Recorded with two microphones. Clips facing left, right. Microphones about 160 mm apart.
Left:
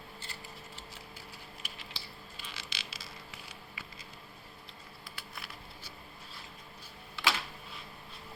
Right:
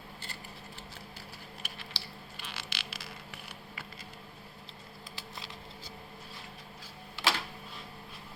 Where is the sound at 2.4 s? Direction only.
65° right (ahead or behind).